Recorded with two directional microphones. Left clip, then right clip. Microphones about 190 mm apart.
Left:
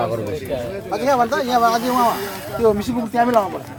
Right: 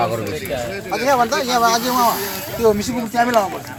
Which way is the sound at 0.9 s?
10° right (ahead or behind).